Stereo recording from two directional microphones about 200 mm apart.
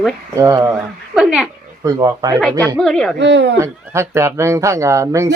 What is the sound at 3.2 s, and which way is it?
Speech, 60° right (ahead or behind).